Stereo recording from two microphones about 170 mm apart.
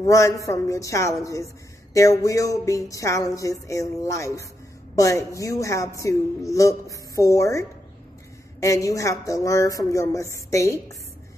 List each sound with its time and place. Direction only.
0.0 s speech: 20° left (ahead or behind)